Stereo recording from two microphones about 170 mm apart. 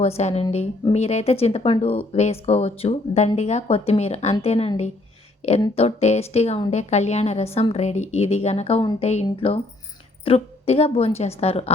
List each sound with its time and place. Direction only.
0.0 s speech: 40° left (ahead or behind)